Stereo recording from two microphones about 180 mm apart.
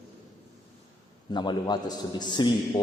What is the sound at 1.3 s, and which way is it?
A man's voice, 25° left (ahead or behind).